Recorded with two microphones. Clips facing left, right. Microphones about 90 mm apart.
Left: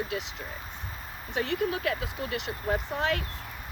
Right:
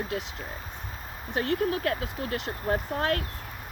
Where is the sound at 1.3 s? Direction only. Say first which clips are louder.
Right 2 dB; 45° right (ahead or behind).